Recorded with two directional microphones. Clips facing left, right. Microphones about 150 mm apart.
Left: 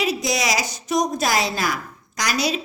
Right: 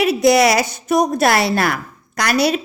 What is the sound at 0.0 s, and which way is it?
A woman's voice, 60° right (ahead or behind).